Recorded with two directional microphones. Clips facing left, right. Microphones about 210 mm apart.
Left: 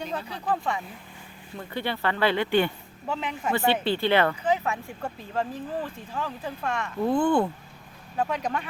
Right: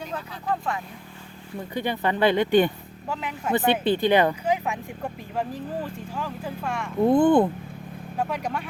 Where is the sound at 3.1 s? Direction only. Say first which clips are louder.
Left 1 dB; centre (ahead or behind).